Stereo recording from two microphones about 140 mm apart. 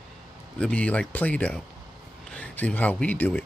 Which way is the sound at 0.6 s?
10° left (ahead or behind).